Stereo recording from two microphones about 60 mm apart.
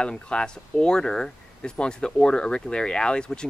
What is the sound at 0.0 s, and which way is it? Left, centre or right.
Speech, centre.